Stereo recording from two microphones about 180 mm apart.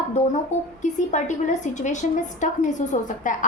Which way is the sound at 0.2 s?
40° left (ahead or behind).